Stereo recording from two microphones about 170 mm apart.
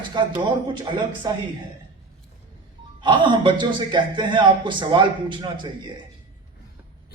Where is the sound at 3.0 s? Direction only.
30° right (ahead or behind).